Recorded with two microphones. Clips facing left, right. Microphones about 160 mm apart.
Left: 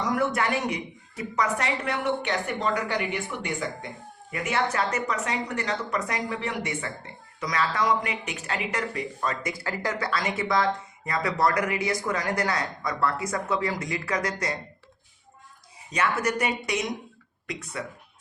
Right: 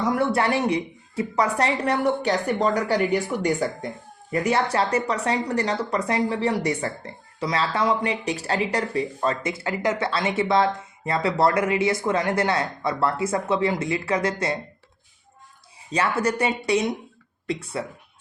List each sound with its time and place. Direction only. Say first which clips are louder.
0.0 s a woman's voice: right 4 dB; 30° right (ahead or behind)
15.9 s speech: right 3 dB; 30° right (ahead or behind)